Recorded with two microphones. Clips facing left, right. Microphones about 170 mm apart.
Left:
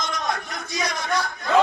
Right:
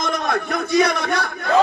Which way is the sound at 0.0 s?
60° right (ahead or behind).